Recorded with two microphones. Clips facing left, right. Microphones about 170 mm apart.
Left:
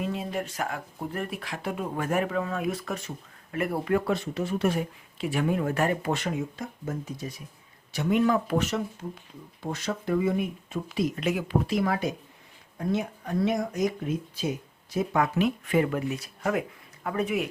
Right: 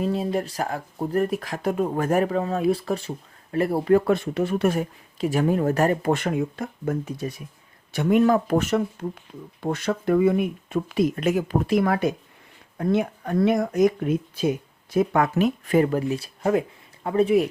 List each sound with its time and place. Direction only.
0.0 s speech: 35° right (ahead or behind)
4.0 s speech: 55° right (ahead or behind)
7.9 s speech: 50° right (ahead or behind)
15.4 s speech: 40° right (ahead or behind)